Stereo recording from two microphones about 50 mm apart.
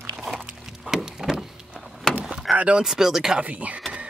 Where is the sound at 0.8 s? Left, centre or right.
Centre.